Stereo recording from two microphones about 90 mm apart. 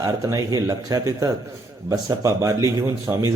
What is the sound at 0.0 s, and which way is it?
Speech, 40° right (ahead or behind).